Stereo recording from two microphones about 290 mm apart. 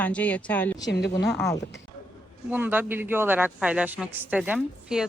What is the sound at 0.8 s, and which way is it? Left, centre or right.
Speech, left.